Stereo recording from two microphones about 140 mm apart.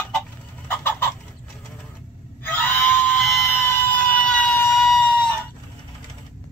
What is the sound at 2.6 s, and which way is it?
Screaming, 15° left (ahead or behind).